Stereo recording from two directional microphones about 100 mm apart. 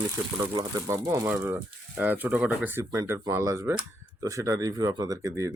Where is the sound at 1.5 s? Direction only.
15° right (ahead or behind).